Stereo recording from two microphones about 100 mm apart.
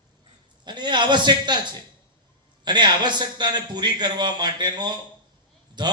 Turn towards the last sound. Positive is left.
turn(degrees=-50)  # may be behind; listen again after turning